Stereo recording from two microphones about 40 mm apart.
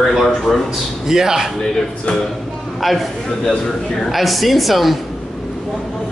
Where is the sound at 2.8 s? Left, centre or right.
Centre.